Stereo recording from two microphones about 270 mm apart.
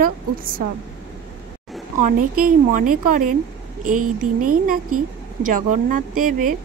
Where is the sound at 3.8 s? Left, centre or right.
Right.